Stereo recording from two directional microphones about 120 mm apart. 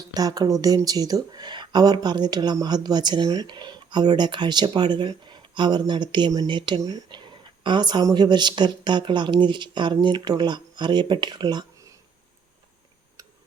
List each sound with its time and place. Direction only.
0.1 s speech: 30° right (ahead or behind)
13.2 s tick-tock: 25° right (ahead or behind)